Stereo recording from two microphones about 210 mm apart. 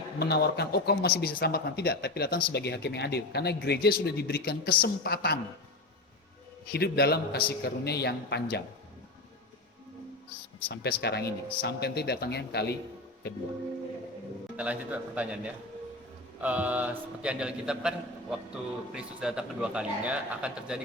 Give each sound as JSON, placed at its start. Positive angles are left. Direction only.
{"t": 0.2, "sound": "speech", "side_deg": 50}
{"t": 6.7, "sound": "speech", "side_deg": 50}
{"t": 10.7, "sound": "speech", "side_deg": 50}
{"t": 14.5, "sound": "a man's voice", "side_deg": -5}